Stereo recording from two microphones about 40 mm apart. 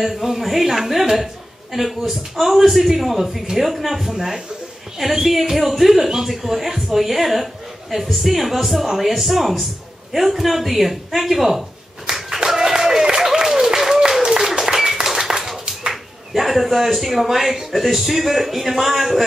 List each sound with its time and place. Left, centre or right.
0.0 s a woman's voice: centre
12.1 s a sound: centre
14.2 s applause: centre
14.8 s clapping: centre
15.9 s speech: centre